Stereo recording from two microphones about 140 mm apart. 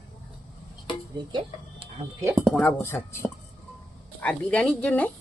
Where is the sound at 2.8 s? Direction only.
15° left (ahead or behind).